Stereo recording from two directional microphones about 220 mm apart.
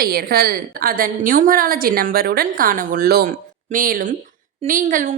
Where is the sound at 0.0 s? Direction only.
45° right (ahead or behind).